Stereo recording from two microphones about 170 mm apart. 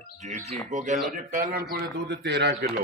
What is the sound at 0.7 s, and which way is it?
Speech, 45° right (ahead or behind).